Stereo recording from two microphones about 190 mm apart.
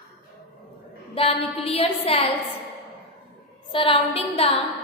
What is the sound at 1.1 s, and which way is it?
A woman's voice, 30° left (ahead or behind).